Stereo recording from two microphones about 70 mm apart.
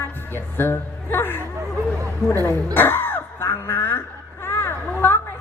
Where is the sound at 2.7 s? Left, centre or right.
Left.